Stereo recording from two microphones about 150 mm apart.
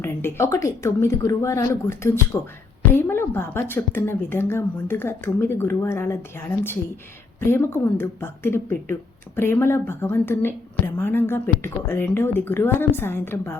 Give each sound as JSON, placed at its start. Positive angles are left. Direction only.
{"t": 0.0, "sound": "a woman's voice", "side_deg": 15}